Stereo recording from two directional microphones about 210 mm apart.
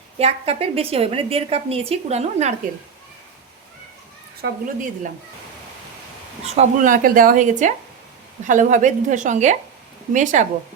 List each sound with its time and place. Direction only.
0.2 s a woman's voice: 30° right (ahead or behind)
4.4 s speech: 55° right (ahead or behind)
6.4 s speech: 30° right (ahead or behind)